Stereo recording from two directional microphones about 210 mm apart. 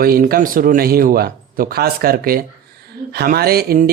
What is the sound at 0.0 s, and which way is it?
Speech, 45° right (ahead or behind).